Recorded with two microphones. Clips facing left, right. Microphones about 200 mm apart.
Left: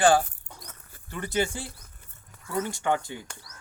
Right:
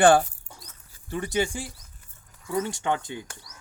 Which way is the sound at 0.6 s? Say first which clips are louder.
Left 4 dB; 60° left (ahead or behind).